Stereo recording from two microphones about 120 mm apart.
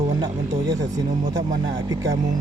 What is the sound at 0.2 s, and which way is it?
Speech, 35° right (ahead or behind).